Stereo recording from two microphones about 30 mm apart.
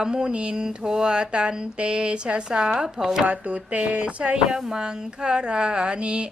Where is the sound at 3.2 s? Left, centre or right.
Right.